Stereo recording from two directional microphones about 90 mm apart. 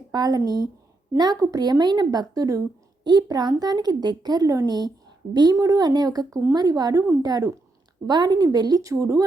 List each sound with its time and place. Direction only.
0.1 s speech: 50° right (ahead or behind)